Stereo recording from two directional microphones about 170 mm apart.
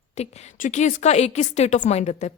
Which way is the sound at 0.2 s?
40° left (ahead or behind).